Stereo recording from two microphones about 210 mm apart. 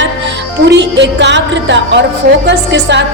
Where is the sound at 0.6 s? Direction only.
55° right (ahead or behind).